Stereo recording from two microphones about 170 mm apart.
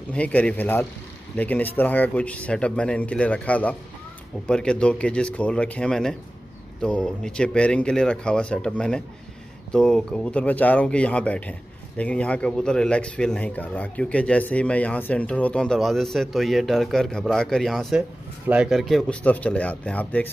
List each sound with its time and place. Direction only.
0.1 s speech: 10° left (ahead or behind)